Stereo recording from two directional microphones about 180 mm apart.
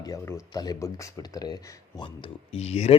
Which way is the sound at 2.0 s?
30° left (ahead or behind).